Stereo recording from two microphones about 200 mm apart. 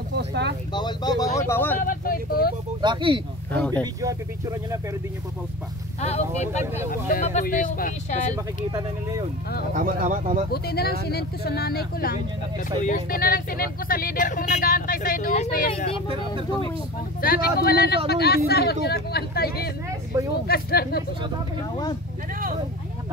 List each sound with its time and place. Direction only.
0.1 s speech: 60° right (ahead or behind)
0.7 s speech: 20° left (ahead or behind)
1.8 s speech: 45° left (ahead or behind)
2.8 s speech: 25° right (ahead or behind)
3.5 s speech: 5° left (ahead or behind)
3.8 s speech: 15° right (ahead or behind)
5.9 s speech: 35° left (ahead or behind)
9.8 s speech: 40° right (ahead or behind)
10.5 s speech: 50° left (ahead or behind)
17.2 s speech: 50° left (ahead or behind)